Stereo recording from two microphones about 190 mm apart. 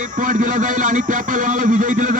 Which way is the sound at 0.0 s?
45° right (ahead or behind).